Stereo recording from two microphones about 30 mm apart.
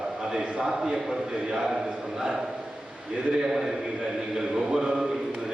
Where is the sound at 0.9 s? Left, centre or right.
Centre.